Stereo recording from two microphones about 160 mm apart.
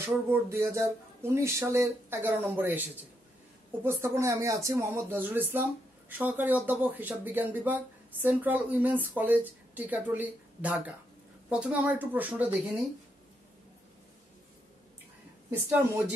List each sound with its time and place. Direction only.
0.0 s speech: 15° right (ahead or behind)